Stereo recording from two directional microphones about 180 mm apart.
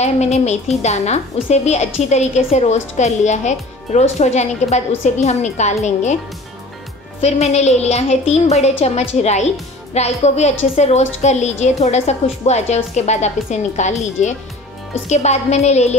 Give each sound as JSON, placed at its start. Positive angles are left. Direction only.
{"t": 0.0, "sound": "a woman's voice", "side_deg": 40}
{"t": 7.2, "sound": "a woman's voice", "side_deg": 35}